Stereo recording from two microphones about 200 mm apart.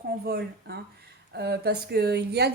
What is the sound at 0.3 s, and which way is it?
A woman's voice, 55° right (ahead or behind).